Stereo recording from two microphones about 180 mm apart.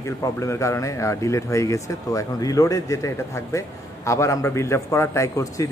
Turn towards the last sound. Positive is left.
turn(degrees=20)  # may be behind; listen again after turning